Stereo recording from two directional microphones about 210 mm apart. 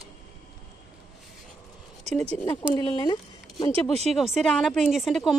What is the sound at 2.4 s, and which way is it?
Speech, 20° left (ahead or behind).